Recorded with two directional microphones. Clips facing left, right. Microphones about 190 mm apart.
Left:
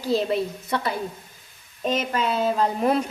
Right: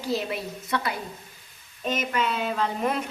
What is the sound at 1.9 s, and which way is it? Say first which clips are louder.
A woman's voice: left 3 dB; 35° left (ahead or behind).